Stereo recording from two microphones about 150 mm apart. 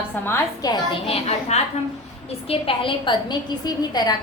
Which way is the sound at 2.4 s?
40° left (ahead or behind).